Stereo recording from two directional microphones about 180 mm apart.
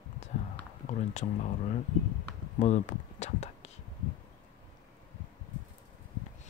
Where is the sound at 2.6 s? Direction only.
40° left (ahead or behind).